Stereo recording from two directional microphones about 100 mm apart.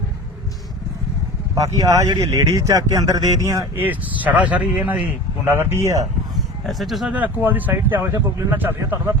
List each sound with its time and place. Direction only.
1.5 s speech: 35° right (ahead or behind)
3.8 s speech: 15° right (ahead or behind)
6.3 s a sound: centre (ahead or behind)
7.1 s speech: 15° right (ahead or behind)